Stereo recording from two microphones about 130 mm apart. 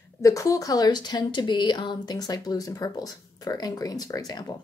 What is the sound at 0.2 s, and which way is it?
A woman's voice, 25° left (ahead or behind).